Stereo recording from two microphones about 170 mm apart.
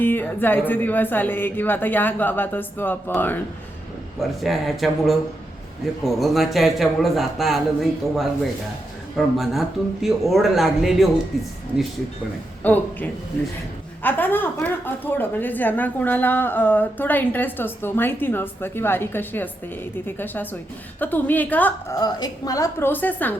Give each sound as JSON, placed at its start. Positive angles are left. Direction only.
{"t": 0.0, "sound": "a woman's voice", "side_deg": 10}
{"t": 4.4, "sound": "a man's voice", "side_deg": 0}
{"t": 12.6, "sound": "a woman's voice", "side_deg": 10}